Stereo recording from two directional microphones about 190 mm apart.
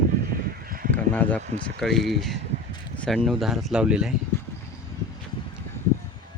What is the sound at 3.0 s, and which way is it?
Speech, centre (ahead or behind).